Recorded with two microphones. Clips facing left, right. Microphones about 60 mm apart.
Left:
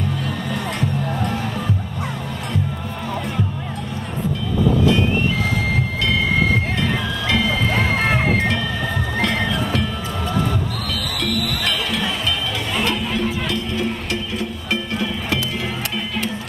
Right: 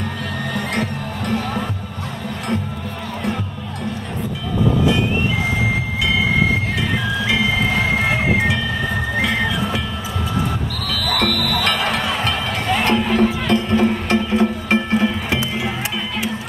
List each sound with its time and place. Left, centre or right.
6.8 s music: centre
11.1 s music: right
11.6 s music: right